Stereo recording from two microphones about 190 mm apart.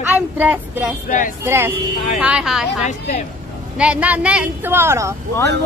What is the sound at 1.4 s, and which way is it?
Speech, 15° right (ahead or behind).